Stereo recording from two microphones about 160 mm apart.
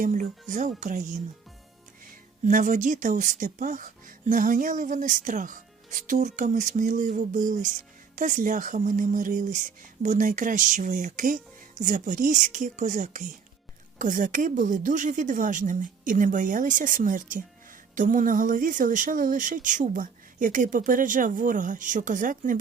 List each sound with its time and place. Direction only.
0.0 s speech: 55° right (ahead or behind)
2.4 s a woman's voice: 55° right (ahead or behind)